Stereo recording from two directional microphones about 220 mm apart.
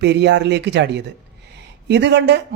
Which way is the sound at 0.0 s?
50° right (ahead or behind).